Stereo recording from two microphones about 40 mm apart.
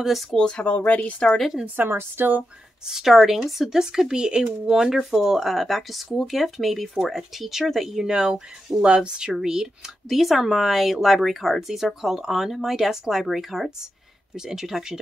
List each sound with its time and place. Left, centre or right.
0.0 s speech: centre
0.3 s speech: centre
0.7 s speech: left
1.9 s speech: right
2.9 s speech: centre
8.1 s speech: centre